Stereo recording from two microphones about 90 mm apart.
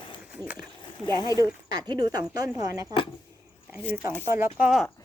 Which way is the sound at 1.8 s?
55° right (ahead or behind).